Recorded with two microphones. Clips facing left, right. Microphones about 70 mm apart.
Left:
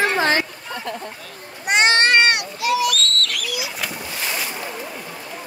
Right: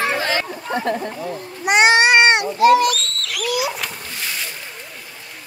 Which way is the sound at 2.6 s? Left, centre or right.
Right.